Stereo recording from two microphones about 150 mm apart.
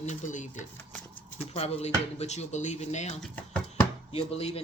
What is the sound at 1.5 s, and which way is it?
Speech, 45° left (ahead or behind).